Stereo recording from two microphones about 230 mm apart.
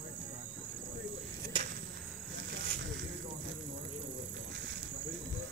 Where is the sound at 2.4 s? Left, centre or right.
Right.